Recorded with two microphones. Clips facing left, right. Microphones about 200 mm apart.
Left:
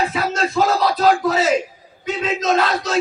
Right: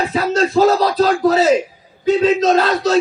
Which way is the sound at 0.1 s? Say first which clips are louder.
Right 5 dB; 35° right (ahead or behind).